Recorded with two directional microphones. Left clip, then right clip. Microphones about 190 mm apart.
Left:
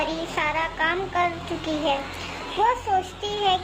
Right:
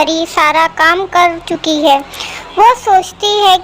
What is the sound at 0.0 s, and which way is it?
Child singing, 35° right (ahead or behind).